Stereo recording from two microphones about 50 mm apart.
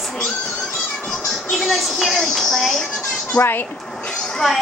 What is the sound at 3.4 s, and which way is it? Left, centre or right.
Speech, left.